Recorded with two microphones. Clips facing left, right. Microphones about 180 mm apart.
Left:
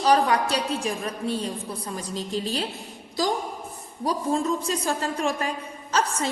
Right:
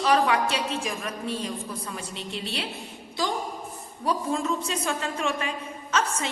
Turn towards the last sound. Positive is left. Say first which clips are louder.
# left 2 dB
turn(degrees=35)  # may be behind; listen again after turning